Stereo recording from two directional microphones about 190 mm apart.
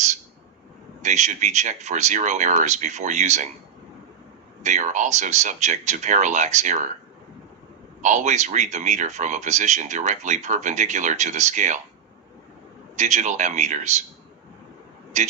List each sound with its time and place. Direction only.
1.0 s speech: 40° right (ahead or behind)
4.6 s speech: 40° right (ahead or behind)
8.0 s speech: 40° right (ahead or behind)
13.0 s speech: 40° right (ahead or behind)
15.1 s speech: 35° right (ahead or behind)